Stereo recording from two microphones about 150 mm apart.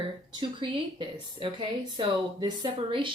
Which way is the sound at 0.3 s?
35° right (ahead or behind).